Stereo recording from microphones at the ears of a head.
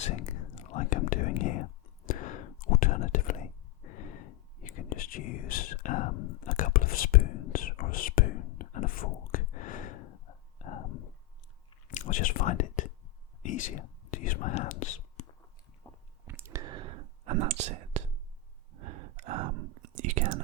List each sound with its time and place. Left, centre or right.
0.0 s whispering: left
16.3 s whispering: right